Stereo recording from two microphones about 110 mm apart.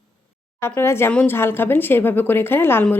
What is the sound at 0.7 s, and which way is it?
A woman's voice, 20° left (ahead or behind).